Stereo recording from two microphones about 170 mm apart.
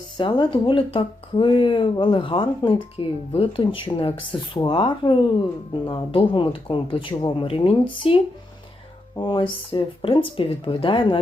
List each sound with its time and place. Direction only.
0.2 s speech: 30° left (ahead or behind)